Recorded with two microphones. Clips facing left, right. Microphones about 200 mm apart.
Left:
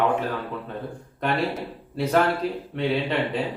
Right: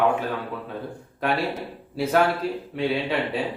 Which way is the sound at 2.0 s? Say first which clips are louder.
Even; centre (ahead or behind).